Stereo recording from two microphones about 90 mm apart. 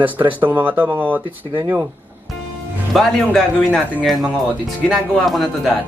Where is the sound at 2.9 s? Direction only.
Centre (ahead or behind).